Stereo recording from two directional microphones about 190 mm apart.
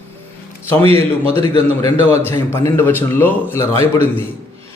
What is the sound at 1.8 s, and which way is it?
A man's voice, 15° left (ahead or behind).